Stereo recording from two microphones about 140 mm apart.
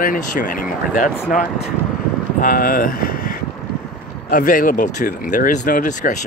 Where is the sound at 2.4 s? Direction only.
90° left; by 6.2 s 70° left (ahead or behind).